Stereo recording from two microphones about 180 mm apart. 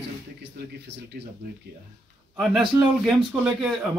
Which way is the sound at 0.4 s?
75° right (ahead or behind).